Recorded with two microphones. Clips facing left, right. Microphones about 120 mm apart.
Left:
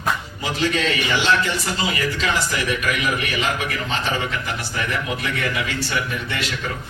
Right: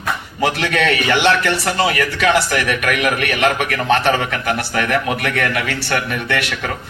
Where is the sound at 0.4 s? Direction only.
65° right (ahead or behind).